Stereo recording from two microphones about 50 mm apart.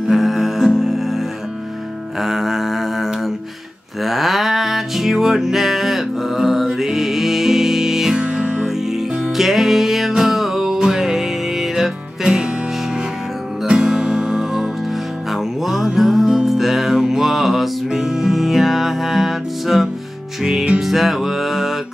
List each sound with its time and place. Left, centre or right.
0.1 s music: centre
2.1 s a sound: centre
4.0 s music: centre
8.2 s music: right
8.6 s music: centre